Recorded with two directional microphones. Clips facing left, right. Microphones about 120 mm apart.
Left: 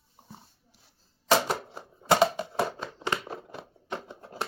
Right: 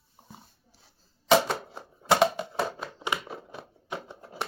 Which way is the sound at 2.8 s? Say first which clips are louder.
Left 1 dB; 10° right (ahead or behind).